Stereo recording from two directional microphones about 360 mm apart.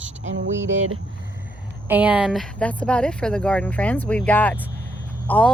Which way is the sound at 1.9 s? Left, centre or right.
Centre.